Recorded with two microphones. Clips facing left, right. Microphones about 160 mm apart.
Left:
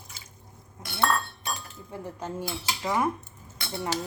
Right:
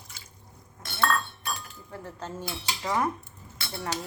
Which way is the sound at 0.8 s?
10° left (ahead or behind).